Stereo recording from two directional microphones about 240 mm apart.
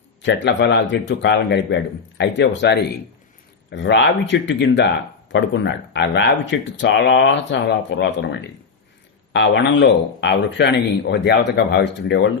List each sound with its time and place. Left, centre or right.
0.2 s speech: left